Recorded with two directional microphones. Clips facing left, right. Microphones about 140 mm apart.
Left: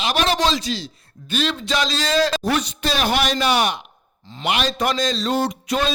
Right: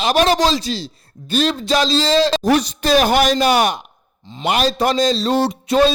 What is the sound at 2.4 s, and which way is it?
A man's voice, 40° right (ahead or behind).